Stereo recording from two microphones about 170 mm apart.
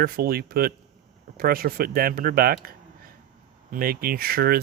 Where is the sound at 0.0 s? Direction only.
60° right (ahead or behind).